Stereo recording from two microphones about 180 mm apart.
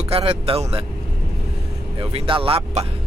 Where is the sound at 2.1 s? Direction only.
30° right (ahead or behind).